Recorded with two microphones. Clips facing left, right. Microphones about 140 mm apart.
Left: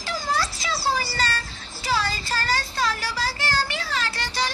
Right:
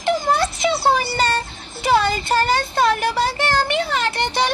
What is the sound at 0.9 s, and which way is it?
Music, 20° right (ahead or behind).